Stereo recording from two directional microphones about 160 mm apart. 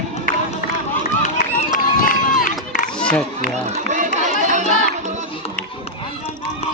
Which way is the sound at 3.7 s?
50° right (ahead or behind).